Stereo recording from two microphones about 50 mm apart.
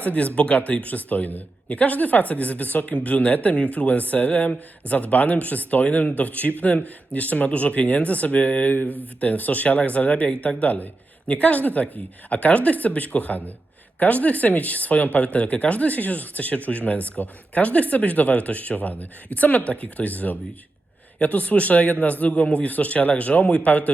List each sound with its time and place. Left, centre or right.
0.0 s speech: left